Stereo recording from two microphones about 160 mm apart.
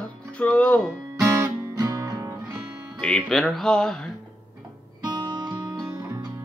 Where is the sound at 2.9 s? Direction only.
Centre (ahead or behind).